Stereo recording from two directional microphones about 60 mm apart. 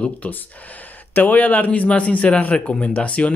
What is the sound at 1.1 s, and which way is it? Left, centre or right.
A man's voice, left.